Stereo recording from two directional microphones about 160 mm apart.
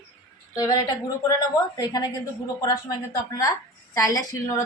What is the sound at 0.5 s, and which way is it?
A woman's voice, 25° left (ahead or behind).